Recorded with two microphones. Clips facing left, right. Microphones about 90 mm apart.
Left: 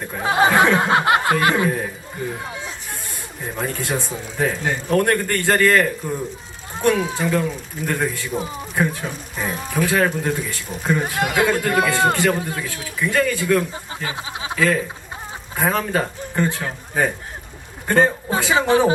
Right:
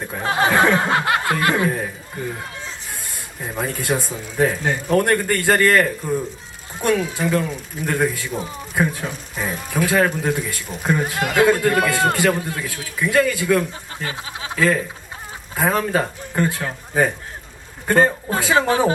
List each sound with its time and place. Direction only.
0.1 s speech: 5° left (ahead or behind)
0.9 s a sound: 20° left (ahead or behind)
3.4 s speech: 5° right (ahead or behind)
7.2 s speech: centre (ahead or behind)